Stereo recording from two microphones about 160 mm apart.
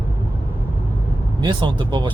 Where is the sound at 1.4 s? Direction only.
30° right (ahead or behind).